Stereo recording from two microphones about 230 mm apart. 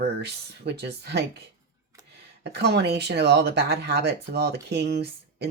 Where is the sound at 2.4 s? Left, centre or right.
Right.